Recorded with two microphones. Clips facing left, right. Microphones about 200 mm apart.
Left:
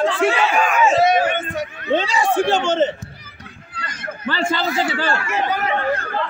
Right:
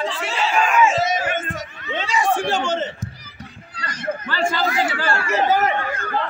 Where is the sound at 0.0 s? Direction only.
55° left (ahead or behind).